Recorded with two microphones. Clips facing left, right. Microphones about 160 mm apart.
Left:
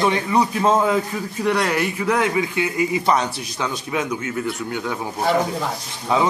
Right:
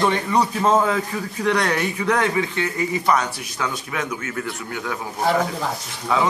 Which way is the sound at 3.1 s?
25° left (ahead or behind).